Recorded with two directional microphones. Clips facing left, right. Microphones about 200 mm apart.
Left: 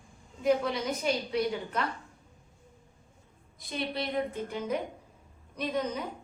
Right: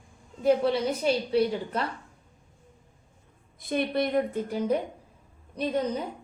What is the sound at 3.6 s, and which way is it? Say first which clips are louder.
A woman's voice: right 8 dB; 55° right (ahead or behind).